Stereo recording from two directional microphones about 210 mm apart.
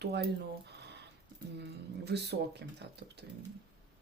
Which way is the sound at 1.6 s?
55° right (ahead or behind).